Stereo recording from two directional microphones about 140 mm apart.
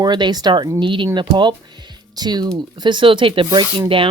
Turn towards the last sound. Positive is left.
turn(degrees=-40)  # may be behind; listen again after turning